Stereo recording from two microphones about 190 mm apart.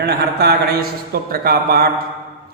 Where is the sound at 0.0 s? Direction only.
60° right (ahead or behind).